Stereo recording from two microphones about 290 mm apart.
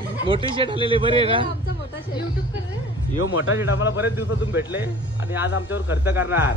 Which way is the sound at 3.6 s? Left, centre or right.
Left.